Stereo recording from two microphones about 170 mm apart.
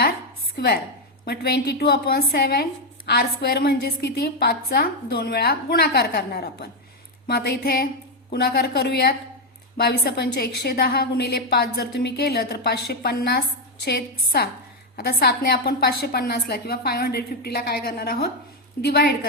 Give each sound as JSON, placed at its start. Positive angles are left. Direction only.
{"t": 0.5, "sound": "a woman's voice", "side_deg": 70}